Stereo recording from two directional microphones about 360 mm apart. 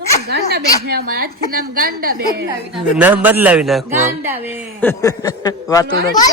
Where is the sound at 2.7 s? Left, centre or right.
Centre.